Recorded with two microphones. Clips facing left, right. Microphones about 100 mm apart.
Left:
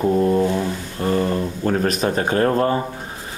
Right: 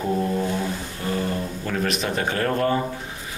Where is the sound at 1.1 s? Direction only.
40° left (ahead or behind).